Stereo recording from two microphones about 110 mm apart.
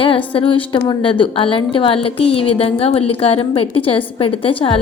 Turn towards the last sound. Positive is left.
turn(degrees=55)  # may be behind; listen again after turning